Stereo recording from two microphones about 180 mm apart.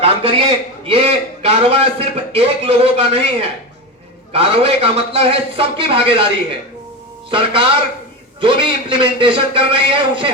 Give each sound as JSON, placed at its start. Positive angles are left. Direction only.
{"t": 0.0, "sound": "a man's voice", "side_deg": -30}
{"t": 4.3, "sound": "a man's voice", "side_deg": -30}